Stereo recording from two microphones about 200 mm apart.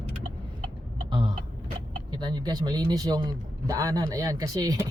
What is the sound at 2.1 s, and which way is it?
A man's voice, 20° right (ahead or behind).